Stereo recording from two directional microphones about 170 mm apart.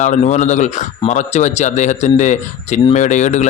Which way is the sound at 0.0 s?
45° left (ahead or behind).